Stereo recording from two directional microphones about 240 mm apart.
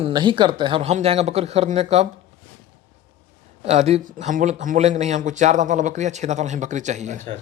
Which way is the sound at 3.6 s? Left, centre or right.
Right.